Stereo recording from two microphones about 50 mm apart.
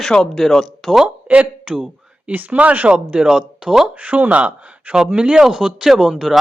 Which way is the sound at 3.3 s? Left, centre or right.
Centre.